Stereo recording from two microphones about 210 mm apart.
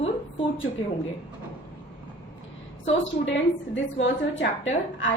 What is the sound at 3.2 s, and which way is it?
A woman's voice, 60° left (ahead or behind).